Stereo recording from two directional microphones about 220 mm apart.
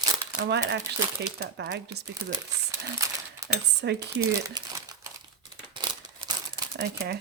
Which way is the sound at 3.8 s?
50° right (ahead or behind).